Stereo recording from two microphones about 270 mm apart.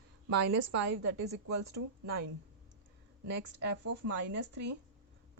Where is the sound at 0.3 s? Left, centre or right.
Right.